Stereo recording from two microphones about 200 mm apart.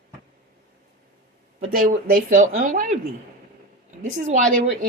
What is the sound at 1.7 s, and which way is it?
Speech, 45° right (ahead or behind).